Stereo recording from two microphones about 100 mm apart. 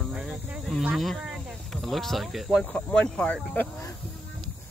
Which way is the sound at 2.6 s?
10° left (ahead or behind).